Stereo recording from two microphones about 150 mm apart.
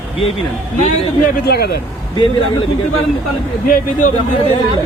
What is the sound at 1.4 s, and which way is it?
Speech, 90° left.